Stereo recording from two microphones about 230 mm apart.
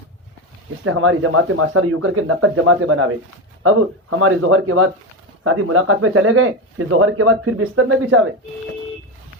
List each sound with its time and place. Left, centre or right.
0.9 s speech: right
4.2 s speech: right